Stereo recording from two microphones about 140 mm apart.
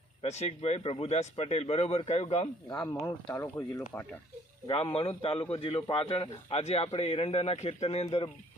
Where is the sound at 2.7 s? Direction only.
25° left (ahead or behind); by 4.1 s 10° left (ahead or behind).